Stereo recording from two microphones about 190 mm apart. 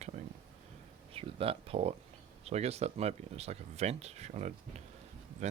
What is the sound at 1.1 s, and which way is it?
Speech, 30° right (ahead or behind).